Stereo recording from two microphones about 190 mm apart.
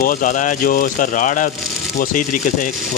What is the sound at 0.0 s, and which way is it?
Speech, 45° left (ahead or behind).